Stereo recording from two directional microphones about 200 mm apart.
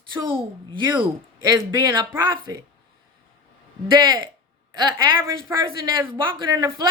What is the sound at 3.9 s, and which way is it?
Speech, 20° right (ahead or behind).